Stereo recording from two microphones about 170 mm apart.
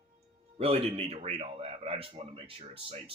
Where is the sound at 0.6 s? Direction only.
35° right (ahead or behind).